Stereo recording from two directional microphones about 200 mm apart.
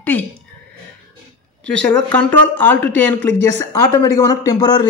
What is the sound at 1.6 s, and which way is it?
A man's voice, 5° left (ahead or behind).